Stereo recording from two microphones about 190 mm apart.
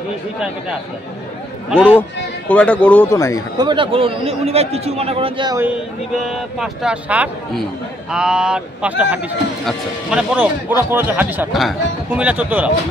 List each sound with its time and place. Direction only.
1.7 s speech: 5° right (ahead or behind)
2.0 s speech: 10° left (ahead or behind)
3.5 s a man's voice: 25° right (ahead or behind)
6.2 s speech: 5° right (ahead or behind)